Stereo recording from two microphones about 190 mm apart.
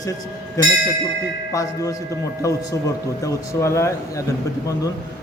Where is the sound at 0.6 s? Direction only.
20° left (ahead or behind).